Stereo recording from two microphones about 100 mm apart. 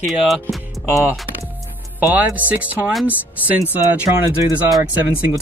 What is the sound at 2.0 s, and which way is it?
Speech, 15° right (ahead or behind).